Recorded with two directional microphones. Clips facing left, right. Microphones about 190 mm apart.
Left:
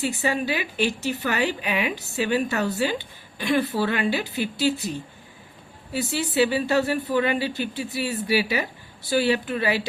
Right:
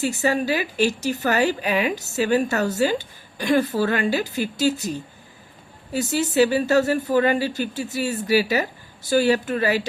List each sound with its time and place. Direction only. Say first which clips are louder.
0.0 s speech: right 3 dB; 40° right (ahead or behind)